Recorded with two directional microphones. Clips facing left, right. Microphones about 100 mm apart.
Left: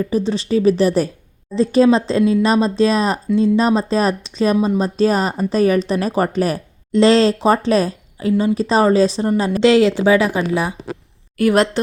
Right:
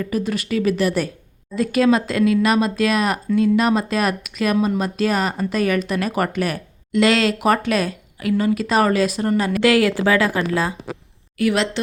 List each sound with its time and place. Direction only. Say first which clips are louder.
0.0 s speech: left 4 dB; 25° left (ahead or behind)
11.3 s a woman's voice: left 5 dB; 45° left (ahead or behind)